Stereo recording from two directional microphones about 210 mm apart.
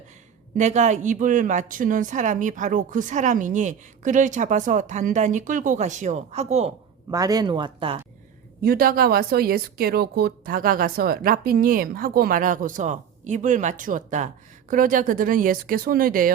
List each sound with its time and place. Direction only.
0.5 s speech: 35° right (ahead or behind)
7.1 s speech: 15° right (ahead or behind)
8.6 s speech: 45° right (ahead or behind)